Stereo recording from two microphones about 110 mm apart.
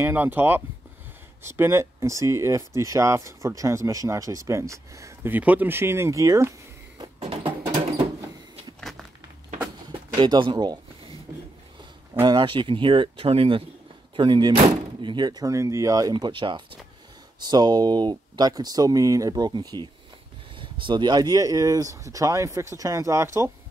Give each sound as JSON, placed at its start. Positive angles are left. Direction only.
{"t": 0.0, "sound": "speech", "side_deg": -20}
{"t": 5.3, "sound": "speech", "side_deg": -15}
{"t": 7.2, "sound": "music", "side_deg": -60}
{"t": 10.1, "sound": "speech", "side_deg": -45}
{"t": 12.2, "sound": "speech", "side_deg": -50}
{"t": 14.1, "sound": "speech", "side_deg": -45}
{"t": 16.1, "sound": "speech", "side_deg": -45}